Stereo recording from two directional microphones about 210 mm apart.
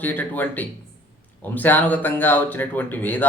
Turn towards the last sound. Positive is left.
turn(degrees=10)  # may be behind; listen again after turning